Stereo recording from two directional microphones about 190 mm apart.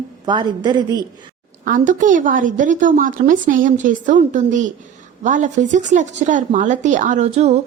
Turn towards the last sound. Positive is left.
turn(degrees=-35)  # may be behind; listen again after turning